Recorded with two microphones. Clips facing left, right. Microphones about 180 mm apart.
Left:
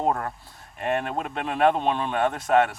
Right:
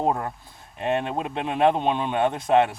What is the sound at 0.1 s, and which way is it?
Speech, 10° right (ahead or behind).